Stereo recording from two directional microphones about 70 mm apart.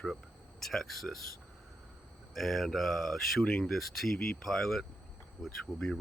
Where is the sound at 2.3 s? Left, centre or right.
Centre.